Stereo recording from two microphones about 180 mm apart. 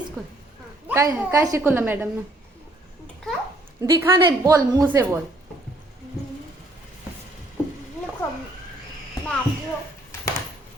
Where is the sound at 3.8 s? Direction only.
15° right (ahead or behind).